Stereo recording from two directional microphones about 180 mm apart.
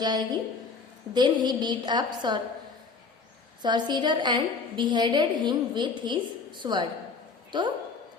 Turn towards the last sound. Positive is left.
turn(degrees=-25)  # may be behind; listen again after turning